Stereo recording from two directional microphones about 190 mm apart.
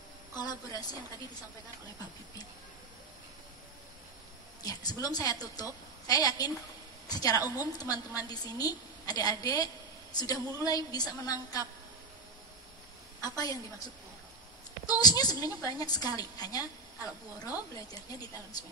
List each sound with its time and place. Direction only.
0.4 s a woman's voice: 20° left (ahead or behind)
4.6 s a woman's voice: 20° left (ahead or behind)
13.2 s a woman's voice: 20° left (ahead or behind)
15.0 s a woman's voice: 20° left (ahead or behind)